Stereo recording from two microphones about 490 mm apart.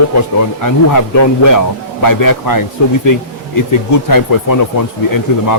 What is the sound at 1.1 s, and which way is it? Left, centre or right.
Speech, left.